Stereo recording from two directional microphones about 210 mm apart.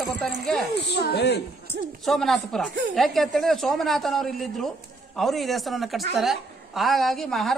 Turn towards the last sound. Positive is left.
turn(degrees=0)  # may be behind; listen again after turning